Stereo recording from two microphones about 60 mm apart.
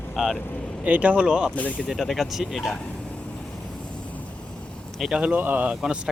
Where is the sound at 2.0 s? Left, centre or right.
Centre.